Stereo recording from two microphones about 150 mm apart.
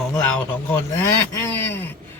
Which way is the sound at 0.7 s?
15° left (ahead or behind).